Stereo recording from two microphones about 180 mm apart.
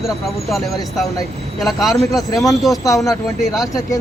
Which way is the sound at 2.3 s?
20° left (ahead or behind).